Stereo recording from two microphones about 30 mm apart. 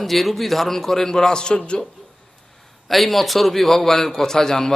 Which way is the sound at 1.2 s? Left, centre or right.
Left.